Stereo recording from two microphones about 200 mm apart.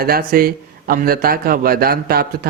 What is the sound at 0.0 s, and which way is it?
A man's voice, 50° right (ahead or behind).